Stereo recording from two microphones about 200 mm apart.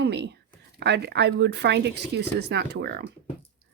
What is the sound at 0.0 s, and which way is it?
Speech, 55° right (ahead or behind).